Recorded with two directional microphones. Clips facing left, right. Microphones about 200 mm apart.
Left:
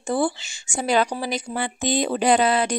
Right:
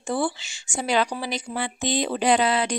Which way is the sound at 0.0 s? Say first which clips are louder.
Left 3 dB; 45° left (ahead or behind).